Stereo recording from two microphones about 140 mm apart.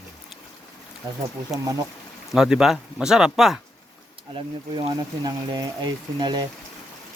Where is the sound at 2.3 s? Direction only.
5° right (ahead or behind).